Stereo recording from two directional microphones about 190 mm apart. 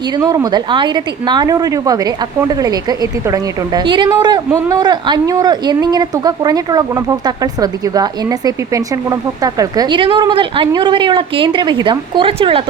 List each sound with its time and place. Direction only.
0.2 s a woman's voice: 20° right (ahead or behind)